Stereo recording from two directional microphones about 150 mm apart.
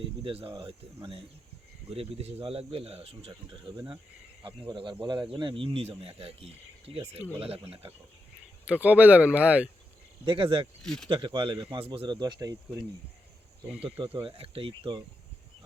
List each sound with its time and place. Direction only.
0.3 s speech: 35° right (ahead or behind)
1.9 s speech: 40° right (ahead or behind)
8.6 s speech: 10° right (ahead or behind)
10.2 s speech: 35° right (ahead or behind)
10.8 s speech: 5° left (ahead or behind)
11.1 s speech: 35° right (ahead or behind)
13.7 s speech: 10° right (ahead or behind)
14.0 s speech: 35° right (ahead or behind)